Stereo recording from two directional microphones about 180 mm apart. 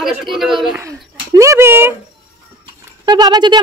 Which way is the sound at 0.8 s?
15° right (ahead or behind).